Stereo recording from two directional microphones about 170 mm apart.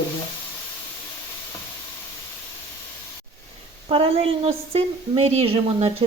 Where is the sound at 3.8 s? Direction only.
35° right (ahead or behind).